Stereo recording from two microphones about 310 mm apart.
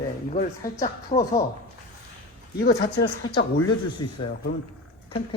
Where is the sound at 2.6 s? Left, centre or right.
Left.